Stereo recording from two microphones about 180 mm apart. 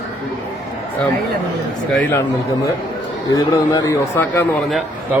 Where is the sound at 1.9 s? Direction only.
10° left (ahead or behind).